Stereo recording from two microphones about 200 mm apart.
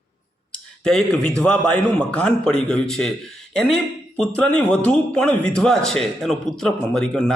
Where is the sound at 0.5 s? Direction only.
Centre (ahead or behind).